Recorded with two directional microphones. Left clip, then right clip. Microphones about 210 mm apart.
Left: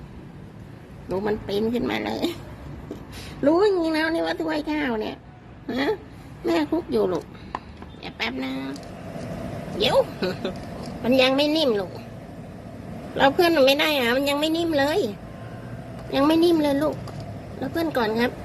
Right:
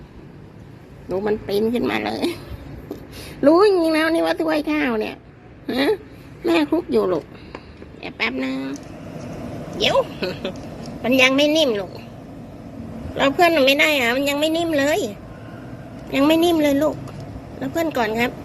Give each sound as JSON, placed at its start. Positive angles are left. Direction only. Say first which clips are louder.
{"t": 1.1, "sound": "a woman's voice", "louder": "right 4 dB", "side_deg": 0}
{"t": 3.4, "sound": "a woman's voice", "louder": "right 5 dB", "side_deg": -10}
{"t": 6.4, "sound": "a woman's voice", "louder": "right 4 dB", "side_deg": -10}
{"t": 9.8, "sound": "a woman's voice", "louder": "right 2 dB", "side_deg": 5}
{"t": 13.1, "sound": "a woman's voice", "louder": "right 2 dB", "side_deg": 10}
{"t": 17.7, "sound": "a woman's voice", "louder": "right 3 dB", "side_deg": 10}